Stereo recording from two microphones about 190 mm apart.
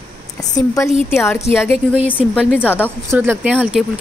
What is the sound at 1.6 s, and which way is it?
A woman's voice, 10° left (ahead or behind).